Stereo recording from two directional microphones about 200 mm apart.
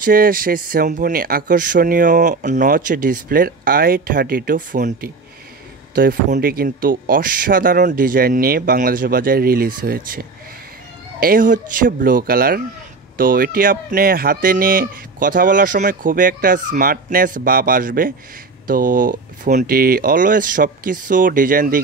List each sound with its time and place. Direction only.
0.0 s speech: 45° right (ahead or behind)
5.9 s speech: 50° right (ahead or behind)